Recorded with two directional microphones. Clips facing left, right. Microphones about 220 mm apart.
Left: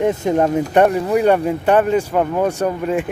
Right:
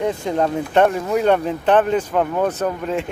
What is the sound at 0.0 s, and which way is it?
Speech, 20° left (ahead or behind).